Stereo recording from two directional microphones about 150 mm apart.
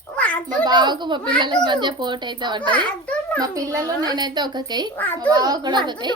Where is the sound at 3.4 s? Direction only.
20° right (ahead or behind).